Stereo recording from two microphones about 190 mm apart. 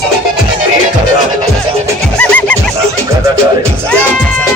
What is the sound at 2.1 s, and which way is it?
Music, 5° left (ahead or behind).